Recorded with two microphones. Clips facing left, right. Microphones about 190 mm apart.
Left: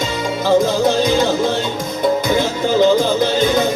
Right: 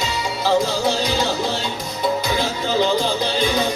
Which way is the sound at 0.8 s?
50° left (ahead or behind).